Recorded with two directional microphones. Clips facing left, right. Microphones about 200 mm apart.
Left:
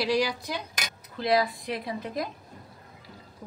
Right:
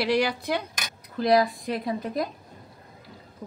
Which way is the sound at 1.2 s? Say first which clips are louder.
Right 4 dB; 45° right (ahead or behind).